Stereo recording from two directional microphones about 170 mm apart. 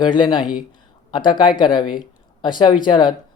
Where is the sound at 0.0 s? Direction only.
25° left (ahead or behind).